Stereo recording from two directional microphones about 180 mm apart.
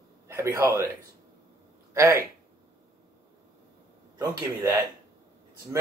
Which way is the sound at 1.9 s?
15° right (ahead or behind).